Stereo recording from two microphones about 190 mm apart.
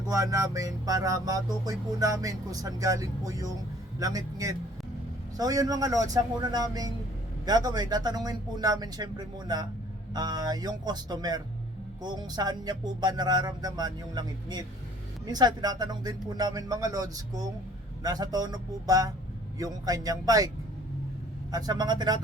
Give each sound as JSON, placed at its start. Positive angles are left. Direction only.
{"t": 0.1, "sound": "music", "side_deg": -15}
{"t": 5.4, "sound": "speech", "side_deg": -20}
{"t": 21.5, "sound": "speech", "side_deg": -20}